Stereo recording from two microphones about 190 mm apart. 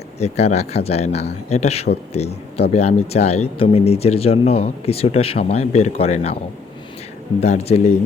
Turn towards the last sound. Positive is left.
turn(degrees=35)  # may be behind; listen again after turning